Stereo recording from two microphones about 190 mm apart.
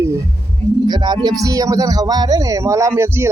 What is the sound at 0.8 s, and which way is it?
Speech, 25° right (ahead or behind).